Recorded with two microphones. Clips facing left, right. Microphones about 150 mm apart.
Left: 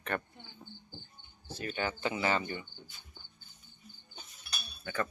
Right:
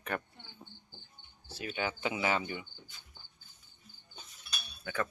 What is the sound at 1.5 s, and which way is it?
Speech, 5° right (ahead or behind).